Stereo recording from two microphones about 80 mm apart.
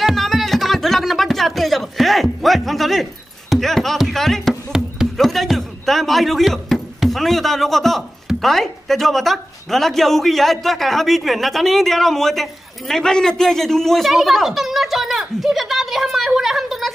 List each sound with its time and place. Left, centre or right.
0.0 s speech: centre